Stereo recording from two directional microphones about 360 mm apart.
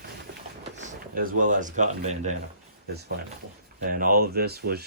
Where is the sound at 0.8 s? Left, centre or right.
Right.